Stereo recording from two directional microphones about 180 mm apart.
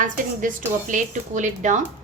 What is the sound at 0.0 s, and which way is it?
A woman's voice, 45° right (ahead or behind).